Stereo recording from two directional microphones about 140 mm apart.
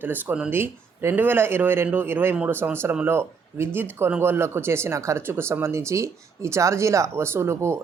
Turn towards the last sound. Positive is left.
turn(degrees=-20)  # may be behind; listen again after turning